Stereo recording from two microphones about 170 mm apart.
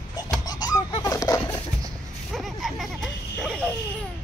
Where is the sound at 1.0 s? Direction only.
20° left (ahead or behind).